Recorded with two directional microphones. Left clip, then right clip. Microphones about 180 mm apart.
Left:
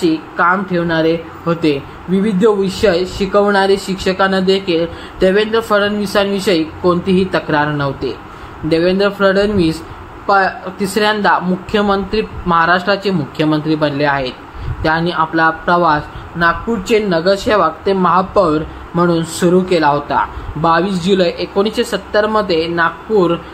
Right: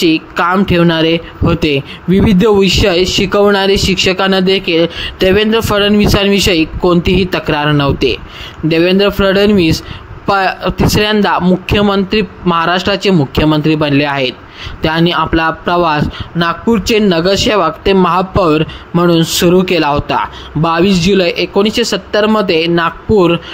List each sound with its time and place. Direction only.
0.0 s a man's voice: 40° right (ahead or behind)